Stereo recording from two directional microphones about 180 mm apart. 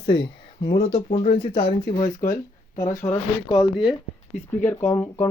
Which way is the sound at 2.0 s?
20° left (ahead or behind).